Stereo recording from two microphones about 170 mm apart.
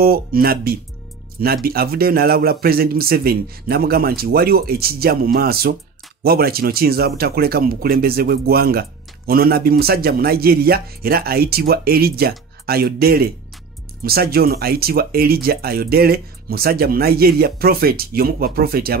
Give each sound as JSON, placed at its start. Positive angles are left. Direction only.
{"t": 0.0, "sound": "speech", "side_deg": -60}